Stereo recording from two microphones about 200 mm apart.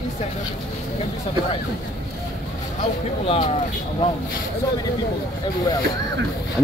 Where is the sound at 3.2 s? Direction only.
25° left (ahead or behind).